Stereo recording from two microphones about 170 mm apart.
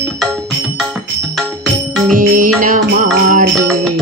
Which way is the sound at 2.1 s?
50° right (ahead or behind).